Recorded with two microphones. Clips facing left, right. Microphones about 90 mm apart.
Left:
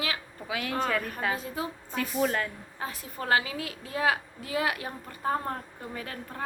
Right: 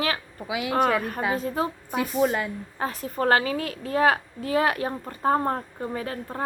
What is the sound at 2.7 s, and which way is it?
A woman's voice, 45° right (ahead or behind).